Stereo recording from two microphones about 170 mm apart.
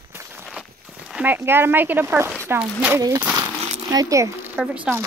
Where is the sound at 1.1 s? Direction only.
10° right (ahead or behind).